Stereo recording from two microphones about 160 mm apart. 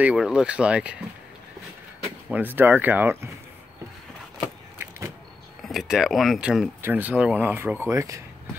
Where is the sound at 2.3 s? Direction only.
10° right (ahead or behind).